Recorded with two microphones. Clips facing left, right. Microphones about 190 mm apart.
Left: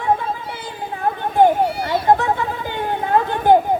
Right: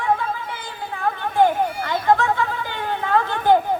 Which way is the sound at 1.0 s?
30° left (ahead or behind).